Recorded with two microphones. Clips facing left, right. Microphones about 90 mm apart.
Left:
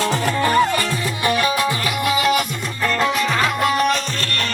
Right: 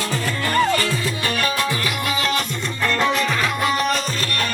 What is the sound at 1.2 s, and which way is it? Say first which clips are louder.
Music: left 5 dB; 15° left (ahead or behind).